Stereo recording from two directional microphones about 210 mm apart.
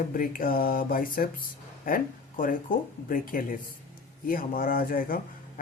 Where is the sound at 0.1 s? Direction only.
45° left (ahead or behind).